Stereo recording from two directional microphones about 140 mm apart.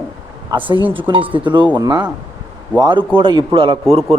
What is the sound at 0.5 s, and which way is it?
Speech, 30° right (ahead or behind).